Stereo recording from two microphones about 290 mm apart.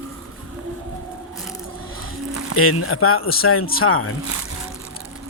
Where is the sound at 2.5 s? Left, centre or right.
Left.